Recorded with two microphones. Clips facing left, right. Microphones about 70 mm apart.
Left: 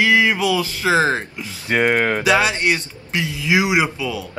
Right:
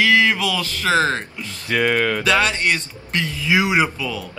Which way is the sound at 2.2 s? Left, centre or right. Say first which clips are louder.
Left 2 dB; centre.